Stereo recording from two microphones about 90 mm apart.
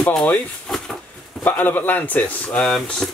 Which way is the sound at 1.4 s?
20° left (ahead or behind).